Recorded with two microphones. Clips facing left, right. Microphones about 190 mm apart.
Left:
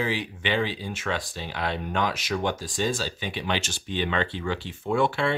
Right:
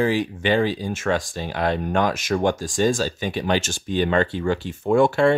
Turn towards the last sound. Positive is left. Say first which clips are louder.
# right 7 dB
turn(degrees=-45)  # may be behind; listen again after turning